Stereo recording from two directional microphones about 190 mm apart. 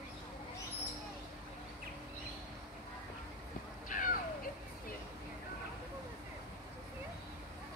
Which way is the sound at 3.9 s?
45° left (ahead or behind).